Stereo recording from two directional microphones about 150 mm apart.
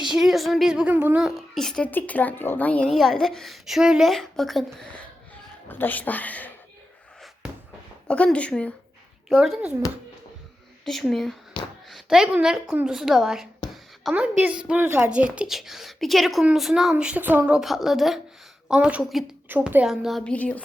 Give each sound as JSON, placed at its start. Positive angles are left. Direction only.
{"t": 0.0, "sound": "a woman's voice", "side_deg": 0}
{"t": 8.0, "sound": "a woman's voice", "side_deg": 5}
{"t": 10.8, "sound": "a woman's voice", "side_deg": 0}
{"t": 11.6, "sound": "a sound", "side_deg": 30}
{"t": 11.9, "sound": "a woman's voice", "side_deg": 0}